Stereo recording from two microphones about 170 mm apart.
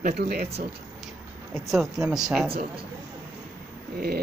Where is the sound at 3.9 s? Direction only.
65° right (ahead or behind).